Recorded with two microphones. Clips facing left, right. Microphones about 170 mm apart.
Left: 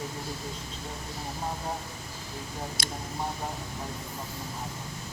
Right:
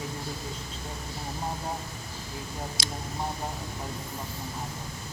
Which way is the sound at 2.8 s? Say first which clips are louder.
Even; 55° left (ahead or behind).